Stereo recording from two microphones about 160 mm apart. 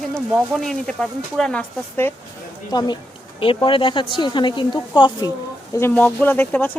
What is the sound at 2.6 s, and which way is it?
Speech, 25° left (ahead or behind).